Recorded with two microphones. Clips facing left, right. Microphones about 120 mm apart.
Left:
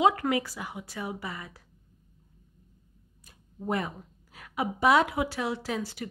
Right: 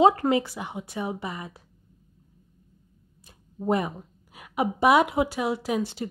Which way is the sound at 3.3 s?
25° right (ahead or behind).